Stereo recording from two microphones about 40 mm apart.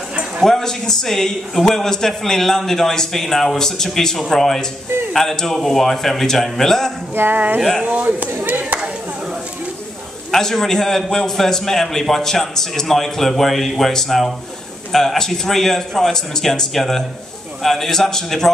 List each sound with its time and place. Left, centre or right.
0.5 s a man's voice: centre
7.3 s speech: right
8.5 s a sound: right
10.3 s a man's voice: centre